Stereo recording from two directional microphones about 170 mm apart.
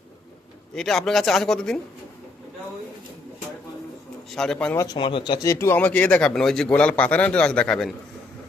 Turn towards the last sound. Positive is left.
turn(degrees=5)  # may be behind; listen again after turning